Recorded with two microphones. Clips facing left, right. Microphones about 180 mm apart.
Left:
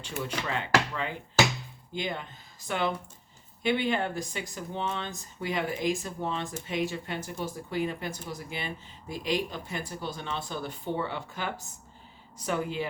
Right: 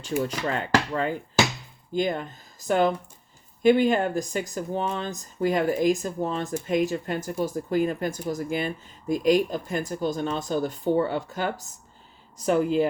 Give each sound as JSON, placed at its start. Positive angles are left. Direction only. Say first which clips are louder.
{"t": 0.2, "sound": "speech", "louder": "right 4 dB", "side_deg": -40}